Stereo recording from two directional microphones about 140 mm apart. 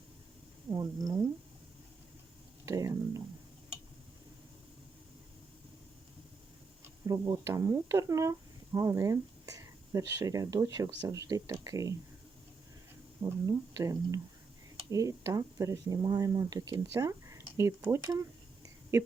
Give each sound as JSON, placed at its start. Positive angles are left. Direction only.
{"t": 0.7, "sound": "speech", "side_deg": -25}
{"t": 2.6, "sound": "speech", "side_deg": -25}
{"t": 7.1, "sound": "speech", "side_deg": -25}
{"t": 13.5, "sound": "speech", "side_deg": -25}
{"t": 18.6, "sound": "a sound", "side_deg": -20}